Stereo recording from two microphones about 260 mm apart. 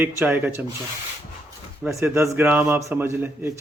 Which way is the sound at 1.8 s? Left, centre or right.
Centre.